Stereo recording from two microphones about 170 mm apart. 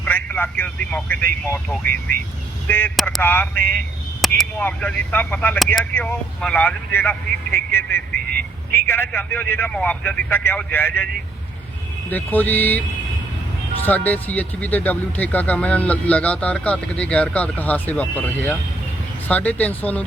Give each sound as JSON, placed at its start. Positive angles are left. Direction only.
{"t": 0.0, "sound": "speech", "side_deg": 10}
{"t": 1.9, "sound": "speech", "side_deg": -60}
{"t": 2.6, "sound": "speech", "side_deg": 10}
{"t": 2.9, "sound": "speech", "side_deg": 0}
{"t": 3.2, "sound": "speech", "side_deg": 10}
{"t": 4.2, "sound": "speech", "side_deg": 0}
{"t": 12.1, "sound": "speech", "side_deg": 10}
{"t": 13.8, "sound": "speech", "side_deg": 10}